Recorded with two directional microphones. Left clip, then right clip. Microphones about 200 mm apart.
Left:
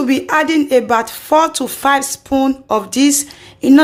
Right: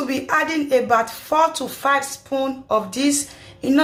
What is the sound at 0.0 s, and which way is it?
Speech, 45° left (ahead or behind).